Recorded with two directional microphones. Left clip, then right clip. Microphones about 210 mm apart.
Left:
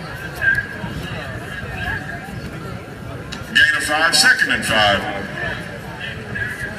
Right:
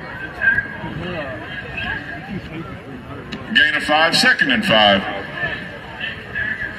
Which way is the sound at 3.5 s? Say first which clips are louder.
Even; 30° right (ahead or behind).